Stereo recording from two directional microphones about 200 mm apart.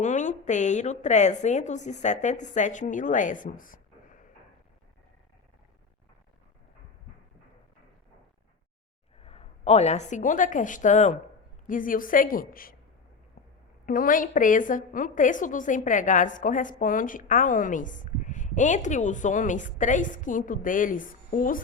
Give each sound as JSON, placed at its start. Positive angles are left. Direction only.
{"t": 0.0, "sound": "a woman's voice", "side_deg": 35}
{"t": 9.2, "sound": "a woman's voice", "side_deg": 30}
{"t": 13.8, "sound": "a woman's voice", "side_deg": 45}